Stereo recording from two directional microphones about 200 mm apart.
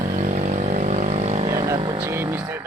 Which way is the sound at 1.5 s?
20° right (ahead or behind).